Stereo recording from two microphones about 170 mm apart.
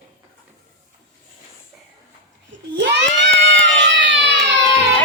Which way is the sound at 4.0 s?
90° right.